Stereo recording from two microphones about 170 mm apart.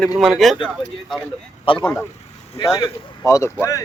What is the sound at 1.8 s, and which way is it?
Speech, 10° left (ahead or behind).